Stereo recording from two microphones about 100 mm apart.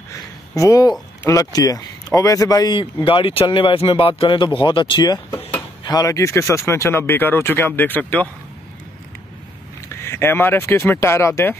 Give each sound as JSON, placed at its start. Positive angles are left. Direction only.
{"t": 0.1, "sound": "a sound", "side_deg": 35}
{"t": 1.2, "sound": "speech", "side_deg": 35}
{"t": 2.7, "sound": "speech", "side_deg": 60}
{"t": 9.8, "sound": "speech", "side_deg": 25}